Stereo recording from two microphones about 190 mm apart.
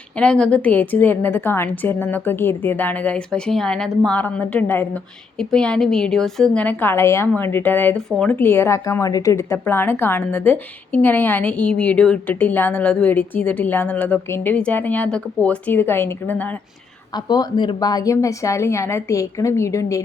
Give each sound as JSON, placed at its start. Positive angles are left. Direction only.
{"t": 0.2, "sound": "a woman's voice", "side_deg": 5}
{"t": 17.2, "sound": "a woman's voice", "side_deg": 20}